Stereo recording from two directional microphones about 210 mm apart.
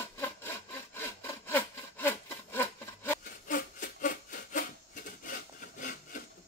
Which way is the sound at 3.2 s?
40° left (ahead or behind).